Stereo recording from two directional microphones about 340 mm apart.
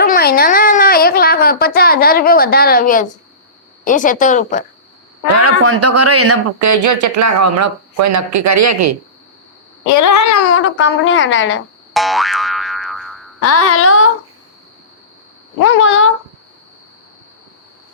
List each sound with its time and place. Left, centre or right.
0.0 s a sound: left
3.8 s speech: left
5.4 s speech: right
9.8 s a sound: left
10.4 s speech: left
11.9 s boing: centre
13.4 s speech: left
15.6 s speech: left